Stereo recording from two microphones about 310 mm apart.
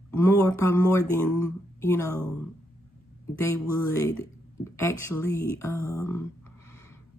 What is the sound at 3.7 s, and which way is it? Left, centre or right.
Speech, centre.